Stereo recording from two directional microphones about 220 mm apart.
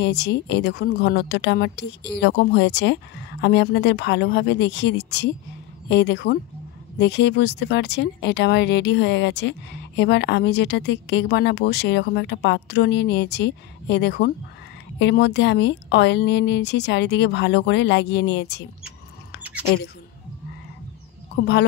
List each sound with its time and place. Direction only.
0.0 s speech: 50° left (ahead or behind)